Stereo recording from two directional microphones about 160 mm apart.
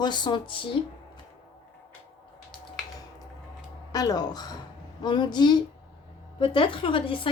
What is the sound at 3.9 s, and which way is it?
A woman's voice, 25° left (ahead or behind).